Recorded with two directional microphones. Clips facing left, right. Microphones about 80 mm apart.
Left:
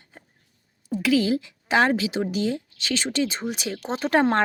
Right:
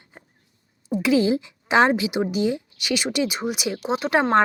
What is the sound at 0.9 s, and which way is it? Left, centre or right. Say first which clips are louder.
A woman's voice: right 2 dB; right.